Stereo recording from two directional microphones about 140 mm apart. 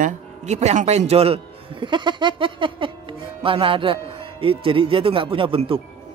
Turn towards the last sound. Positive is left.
turn(degrees=-40)  # may be behind; listen again after turning